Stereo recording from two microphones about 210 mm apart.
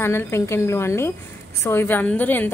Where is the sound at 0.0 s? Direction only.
10° left (ahead or behind).